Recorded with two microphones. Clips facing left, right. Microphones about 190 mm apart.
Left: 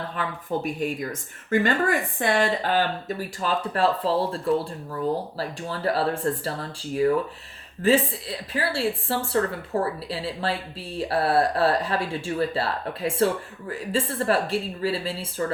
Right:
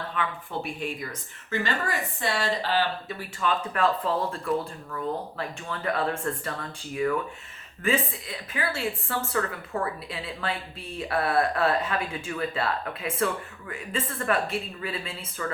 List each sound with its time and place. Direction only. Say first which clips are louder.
0.2 s a woman's voice: left 4 dB; 40° left (ahead or behind)